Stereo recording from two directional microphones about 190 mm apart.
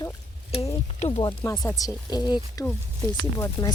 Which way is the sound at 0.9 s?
35° left (ahead or behind).